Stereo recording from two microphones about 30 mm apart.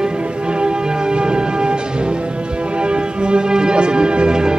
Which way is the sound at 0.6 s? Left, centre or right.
Right.